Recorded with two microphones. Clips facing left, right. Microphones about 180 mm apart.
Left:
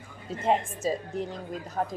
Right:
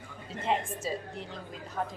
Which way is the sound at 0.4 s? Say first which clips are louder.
Left 5 dB; 45° left (ahead or behind).